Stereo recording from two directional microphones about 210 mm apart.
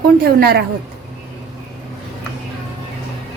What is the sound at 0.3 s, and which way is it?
Speech, 50° right (ahead or behind).